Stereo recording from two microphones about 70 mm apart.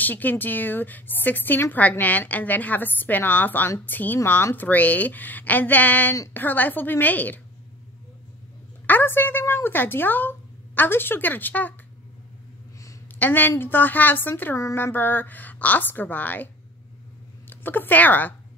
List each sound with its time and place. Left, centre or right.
0.0 s a woman's voice: left
8.8 s a woman's voice: left
13.2 s a woman's voice: left
17.5 s speech: left